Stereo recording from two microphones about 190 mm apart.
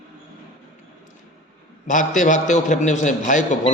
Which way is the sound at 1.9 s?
40° left (ahead or behind).